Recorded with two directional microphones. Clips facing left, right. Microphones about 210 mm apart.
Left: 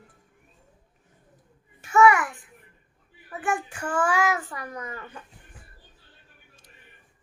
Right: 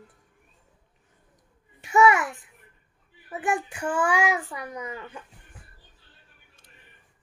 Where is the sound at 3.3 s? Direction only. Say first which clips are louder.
Right 1 dB; 15° right (ahead or behind).